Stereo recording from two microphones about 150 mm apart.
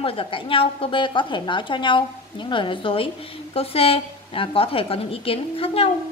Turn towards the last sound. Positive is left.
turn(degrees=40)  # may be behind; listen again after turning